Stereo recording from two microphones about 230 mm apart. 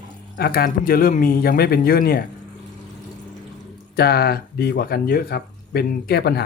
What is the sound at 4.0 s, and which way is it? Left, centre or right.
Speech, left.